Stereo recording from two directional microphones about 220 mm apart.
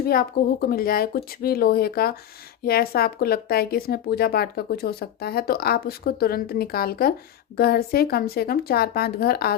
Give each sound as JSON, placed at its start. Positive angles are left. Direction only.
{"t": 0.0, "sound": "speech", "side_deg": 45}